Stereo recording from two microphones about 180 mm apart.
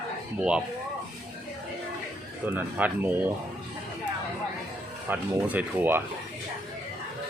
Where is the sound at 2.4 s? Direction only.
10° right (ahead or behind).